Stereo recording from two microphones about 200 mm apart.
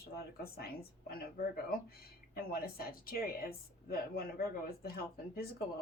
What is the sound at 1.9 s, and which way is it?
Speech, 50° left (ahead or behind).